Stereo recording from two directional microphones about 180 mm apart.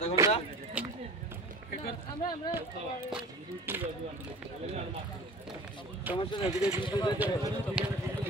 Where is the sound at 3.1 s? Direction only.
5° right (ahead or behind).